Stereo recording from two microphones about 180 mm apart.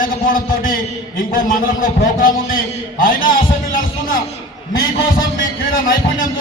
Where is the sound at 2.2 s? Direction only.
50° left (ahead or behind).